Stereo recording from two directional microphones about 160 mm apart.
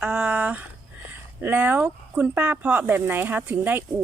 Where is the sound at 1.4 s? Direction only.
10° right (ahead or behind).